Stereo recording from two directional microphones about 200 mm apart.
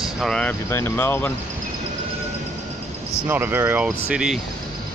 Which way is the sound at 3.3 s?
10° right (ahead or behind).